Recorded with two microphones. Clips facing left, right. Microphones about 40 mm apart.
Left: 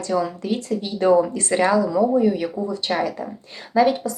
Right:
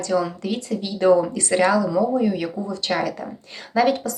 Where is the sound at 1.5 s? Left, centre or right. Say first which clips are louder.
Even; left.